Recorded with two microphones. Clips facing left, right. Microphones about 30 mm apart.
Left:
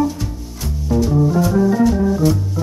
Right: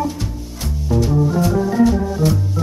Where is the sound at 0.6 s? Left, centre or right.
Centre.